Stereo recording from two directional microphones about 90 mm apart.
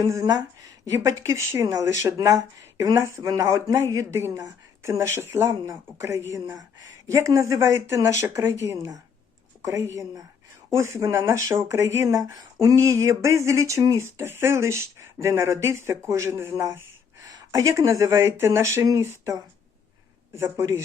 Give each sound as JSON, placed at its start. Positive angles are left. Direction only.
{"t": 0.0, "sound": "speech", "side_deg": -40}